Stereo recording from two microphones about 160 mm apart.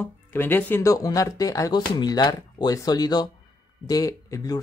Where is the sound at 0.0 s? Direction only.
15° left (ahead or behind).